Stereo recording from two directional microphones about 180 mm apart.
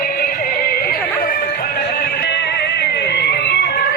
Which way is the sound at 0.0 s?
55° left (ahead or behind).